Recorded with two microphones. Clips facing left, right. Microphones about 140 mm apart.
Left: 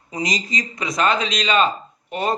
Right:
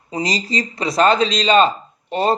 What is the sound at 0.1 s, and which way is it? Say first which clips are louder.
Speech: right 3 dB; 30° right (ahead or behind).